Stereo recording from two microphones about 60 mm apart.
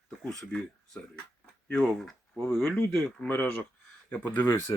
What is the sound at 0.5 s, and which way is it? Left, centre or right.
Speech, left.